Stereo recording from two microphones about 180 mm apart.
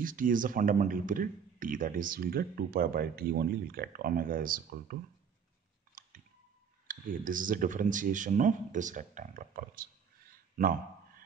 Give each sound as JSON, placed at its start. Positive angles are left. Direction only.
{"t": 0.0, "sound": "speech", "side_deg": -50}
{"t": 6.0, "sound": "clicking", "side_deg": -45}
{"t": 6.9, "sound": "speech", "side_deg": -50}
{"t": 10.5, "sound": "a sound", "side_deg": -50}